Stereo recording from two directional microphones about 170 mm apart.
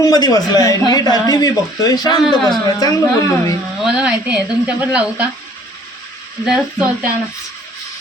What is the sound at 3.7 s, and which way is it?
Speech, 5° right (ahead or behind).